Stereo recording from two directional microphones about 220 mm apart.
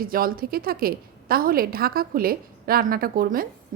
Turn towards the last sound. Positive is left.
turn(degrees=-40)  # may be behind; listen again after turning